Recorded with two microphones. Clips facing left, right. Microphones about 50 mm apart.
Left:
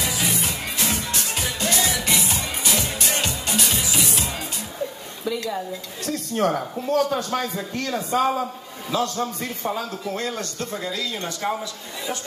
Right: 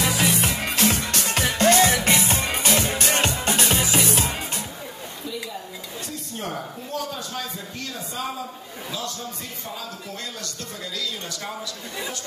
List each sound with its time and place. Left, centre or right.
0.0 s music: right
6.0 s a man's voice: left
10.1 s speech: left